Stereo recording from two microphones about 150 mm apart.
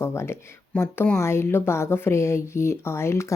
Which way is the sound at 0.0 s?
15° left (ahead or behind).